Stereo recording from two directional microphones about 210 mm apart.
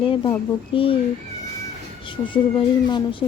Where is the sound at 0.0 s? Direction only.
25° left (ahead or behind).